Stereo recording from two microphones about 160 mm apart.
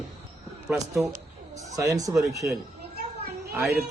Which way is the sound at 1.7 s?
20° right (ahead or behind).